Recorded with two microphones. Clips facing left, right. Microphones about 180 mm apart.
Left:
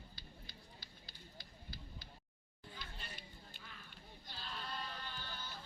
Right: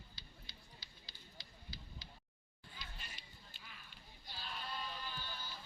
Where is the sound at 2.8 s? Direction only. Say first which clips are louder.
Left 2 dB; 55° left (ahead or behind).